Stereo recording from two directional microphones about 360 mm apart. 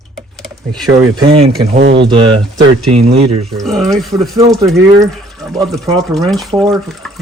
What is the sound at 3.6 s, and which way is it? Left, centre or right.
Speech, centre.